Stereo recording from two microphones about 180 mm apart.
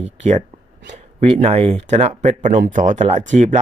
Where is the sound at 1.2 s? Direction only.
35° right (ahead or behind).